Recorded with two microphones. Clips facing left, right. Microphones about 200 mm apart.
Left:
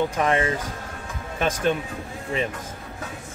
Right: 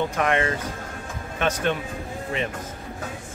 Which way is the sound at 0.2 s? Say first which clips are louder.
Even; 30° left (ahead or behind).